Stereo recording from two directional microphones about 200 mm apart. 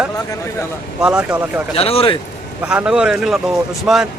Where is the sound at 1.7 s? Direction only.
30° left (ahead or behind).